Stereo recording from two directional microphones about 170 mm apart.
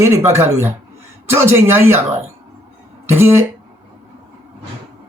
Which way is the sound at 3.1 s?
15° right (ahead or behind).